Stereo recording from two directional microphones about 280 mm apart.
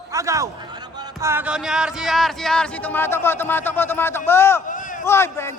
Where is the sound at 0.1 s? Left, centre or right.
Centre.